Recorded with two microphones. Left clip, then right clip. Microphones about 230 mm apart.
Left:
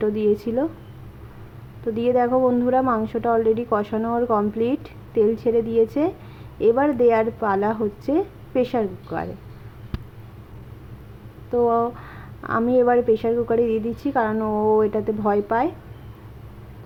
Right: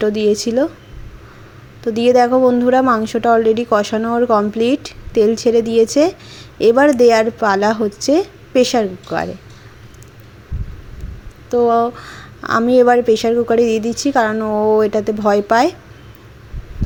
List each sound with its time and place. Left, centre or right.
0.0 s a woman's voice: right
1.8 s a woman's voice: right
11.5 s a woman's voice: centre